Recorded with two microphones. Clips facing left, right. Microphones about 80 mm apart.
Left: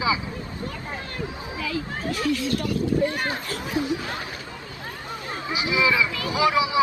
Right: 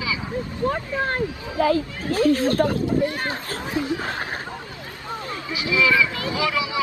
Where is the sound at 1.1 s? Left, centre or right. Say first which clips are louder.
Right 6 dB; right.